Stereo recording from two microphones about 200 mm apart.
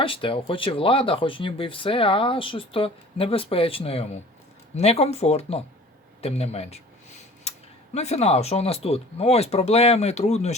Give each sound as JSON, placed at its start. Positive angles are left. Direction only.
{"t": 0.0, "sound": "speech", "side_deg": 25}
{"t": 7.5, "sound": "a sound", "side_deg": 30}
{"t": 7.9, "sound": "speech", "side_deg": 35}